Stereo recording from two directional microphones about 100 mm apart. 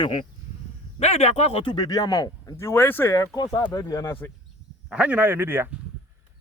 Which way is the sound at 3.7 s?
40° left (ahead or behind).